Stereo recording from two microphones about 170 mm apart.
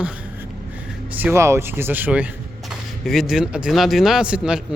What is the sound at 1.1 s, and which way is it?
Speech, 10° right (ahead or behind).